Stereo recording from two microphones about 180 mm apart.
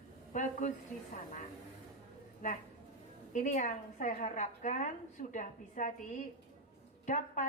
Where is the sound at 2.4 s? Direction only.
45° left (ahead or behind).